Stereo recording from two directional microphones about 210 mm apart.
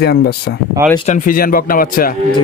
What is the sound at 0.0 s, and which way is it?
Speech, 50° left (ahead or behind).